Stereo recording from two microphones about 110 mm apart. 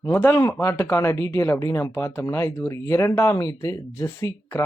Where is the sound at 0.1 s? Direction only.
20° left (ahead or behind).